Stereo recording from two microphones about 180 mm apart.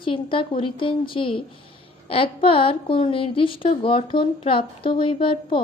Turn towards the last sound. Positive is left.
turn(degrees=30)  # may be behind; listen again after turning